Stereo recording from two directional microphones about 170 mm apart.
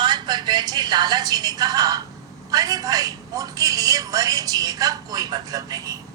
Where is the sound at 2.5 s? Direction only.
20° right (ahead or behind).